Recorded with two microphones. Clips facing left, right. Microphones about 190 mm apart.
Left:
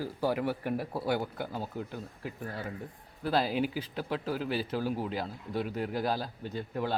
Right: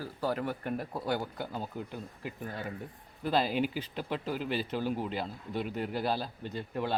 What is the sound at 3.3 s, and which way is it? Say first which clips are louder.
A man's voice: even; 5° left (ahead or behind).